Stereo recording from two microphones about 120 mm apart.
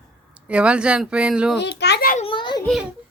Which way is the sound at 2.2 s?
45° left (ahead or behind).